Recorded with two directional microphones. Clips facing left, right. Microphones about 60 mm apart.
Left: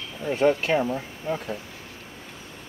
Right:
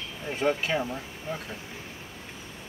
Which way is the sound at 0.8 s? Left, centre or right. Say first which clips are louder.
Left 6 dB; left.